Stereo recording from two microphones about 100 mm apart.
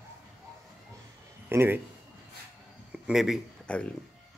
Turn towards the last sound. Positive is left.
turn(degrees=10)  # may be behind; listen again after turning